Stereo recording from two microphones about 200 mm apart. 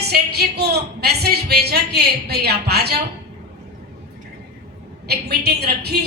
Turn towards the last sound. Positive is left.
turn(degrees=-55)  # may be behind; listen again after turning